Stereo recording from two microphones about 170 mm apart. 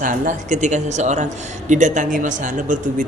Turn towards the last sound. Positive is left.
turn(degrees=-50)  # may be behind; listen again after turning